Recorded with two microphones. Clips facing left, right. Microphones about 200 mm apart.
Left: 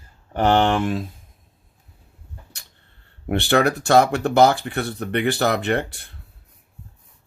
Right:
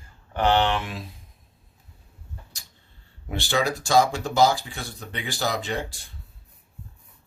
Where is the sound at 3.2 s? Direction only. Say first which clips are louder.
Left 7 dB; 60° left (ahead or behind).